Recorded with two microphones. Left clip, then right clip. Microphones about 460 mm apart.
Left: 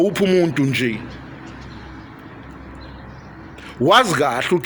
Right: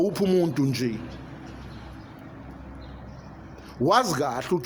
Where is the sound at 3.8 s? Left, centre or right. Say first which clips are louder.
Left 8 dB; right.